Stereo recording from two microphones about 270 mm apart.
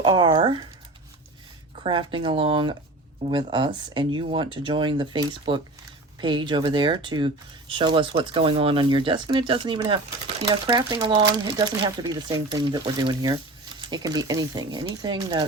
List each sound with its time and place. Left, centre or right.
0.0 s speech: centre
1.8 s speech: centre